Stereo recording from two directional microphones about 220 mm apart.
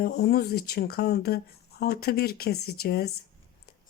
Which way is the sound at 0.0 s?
45° left (ahead or behind).